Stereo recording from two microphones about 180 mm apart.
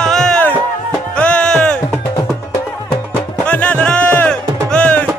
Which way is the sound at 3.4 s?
5° left (ahead or behind).